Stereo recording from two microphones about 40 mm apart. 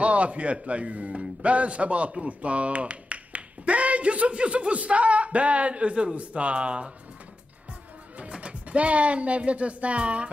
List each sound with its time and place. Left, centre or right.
0.0 s speech: right
8.2 s speech: right